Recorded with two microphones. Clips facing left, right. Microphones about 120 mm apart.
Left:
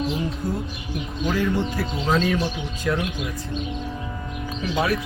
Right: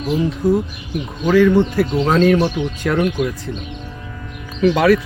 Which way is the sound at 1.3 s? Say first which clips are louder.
Right 11 dB; 80° right.